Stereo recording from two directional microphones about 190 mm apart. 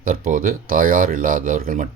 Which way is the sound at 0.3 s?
45° right (ahead or behind).